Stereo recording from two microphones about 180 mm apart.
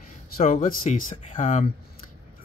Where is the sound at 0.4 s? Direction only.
45° left (ahead or behind).